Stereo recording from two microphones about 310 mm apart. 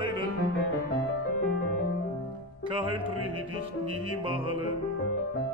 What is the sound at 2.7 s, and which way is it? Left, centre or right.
Music, centre.